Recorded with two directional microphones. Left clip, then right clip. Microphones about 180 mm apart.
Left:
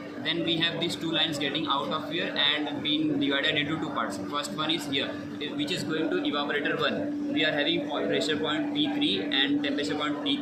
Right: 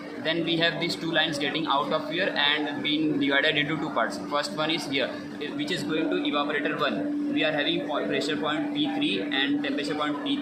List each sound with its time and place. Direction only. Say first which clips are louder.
0.3 s speech: right 2 dB; 25° right (ahead or behind)
6.2 s speech: right 1 dB; 25° right (ahead or behind)